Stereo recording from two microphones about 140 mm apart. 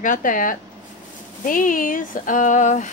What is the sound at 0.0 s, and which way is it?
A woman's voice, 70° left (ahead or behind).